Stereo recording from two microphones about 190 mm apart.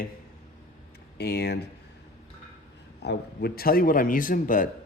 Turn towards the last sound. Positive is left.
turn(degrees=45)  # may be behind; listen again after turning